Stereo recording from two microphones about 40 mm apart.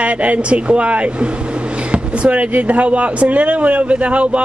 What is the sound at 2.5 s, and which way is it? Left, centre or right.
Speech, right.